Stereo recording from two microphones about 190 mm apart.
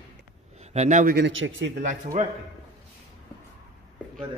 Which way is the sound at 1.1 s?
80° right.